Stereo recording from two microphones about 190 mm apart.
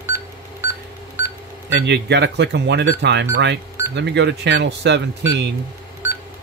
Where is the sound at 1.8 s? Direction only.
65° right (ahead or behind).